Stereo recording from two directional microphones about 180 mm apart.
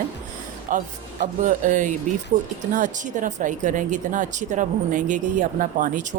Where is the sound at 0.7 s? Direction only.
45° right (ahead or behind).